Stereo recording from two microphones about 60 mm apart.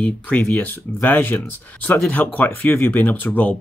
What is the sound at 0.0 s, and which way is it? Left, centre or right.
Speech, left.